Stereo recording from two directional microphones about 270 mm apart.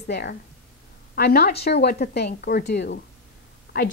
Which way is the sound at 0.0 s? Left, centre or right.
Left.